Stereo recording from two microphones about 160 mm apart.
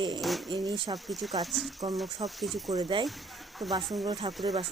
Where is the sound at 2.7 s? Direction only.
25° right (ahead or behind).